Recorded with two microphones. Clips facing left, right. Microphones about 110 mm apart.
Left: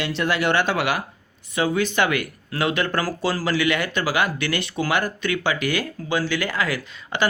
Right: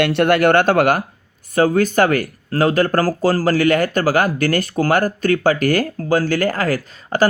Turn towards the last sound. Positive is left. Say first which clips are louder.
# right 7 dB
turn(degrees=-40)  # may be behind; listen again after turning